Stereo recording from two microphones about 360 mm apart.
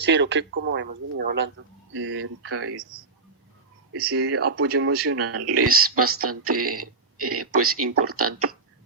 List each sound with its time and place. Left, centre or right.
0.0 s speech: right
4.1 s speech: right